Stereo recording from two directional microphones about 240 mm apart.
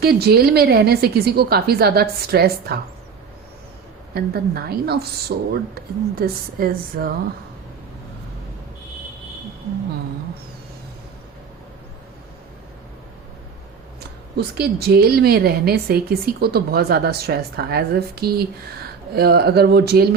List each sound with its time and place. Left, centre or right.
0.0 s a woman's voice: right
4.1 s a woman's voice: right
14.3 s a woman's voice: right